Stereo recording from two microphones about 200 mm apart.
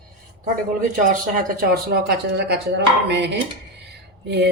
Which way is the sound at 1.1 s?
45° right (ahead or behind).